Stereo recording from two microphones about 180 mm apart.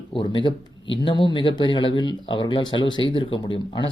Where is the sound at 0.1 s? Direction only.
25° left (ahead or behind).